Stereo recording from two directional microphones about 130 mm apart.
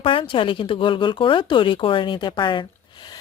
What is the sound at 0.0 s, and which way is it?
Speech, 40° left (ahead or behind).